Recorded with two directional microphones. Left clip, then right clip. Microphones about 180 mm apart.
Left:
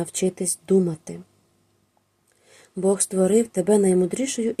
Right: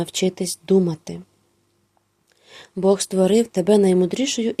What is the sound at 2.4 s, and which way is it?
Speech, 25° right (ahead or behind).